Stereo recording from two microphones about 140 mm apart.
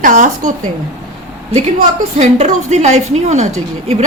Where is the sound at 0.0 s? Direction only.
70° right (ahead or behind).